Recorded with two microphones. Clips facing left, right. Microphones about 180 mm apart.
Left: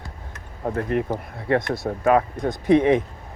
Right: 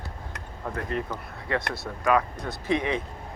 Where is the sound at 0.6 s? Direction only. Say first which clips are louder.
Left 8 dB; 45° left (ahead or behind).